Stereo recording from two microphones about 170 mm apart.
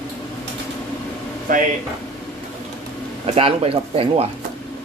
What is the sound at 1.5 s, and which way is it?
Speech, 55° right (ahead or behind).